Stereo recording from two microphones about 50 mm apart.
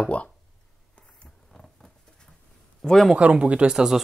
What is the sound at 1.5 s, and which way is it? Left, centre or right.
Patter, centre.